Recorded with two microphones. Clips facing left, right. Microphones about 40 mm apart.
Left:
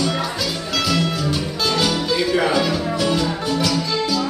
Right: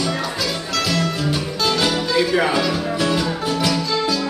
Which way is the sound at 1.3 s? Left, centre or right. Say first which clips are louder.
Right 1 dB; centre.